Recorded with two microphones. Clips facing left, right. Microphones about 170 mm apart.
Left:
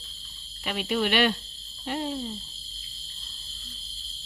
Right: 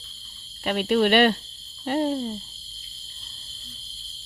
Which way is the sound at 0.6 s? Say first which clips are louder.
Right 6 dB; 55° right (ahead or behind).